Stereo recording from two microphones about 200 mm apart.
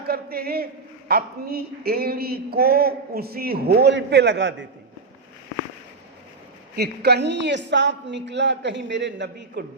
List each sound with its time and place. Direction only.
0.0 s a man's voice: 50° right (ahead or behind)
6.7 s a man's voice: 55° right (ahead or behind)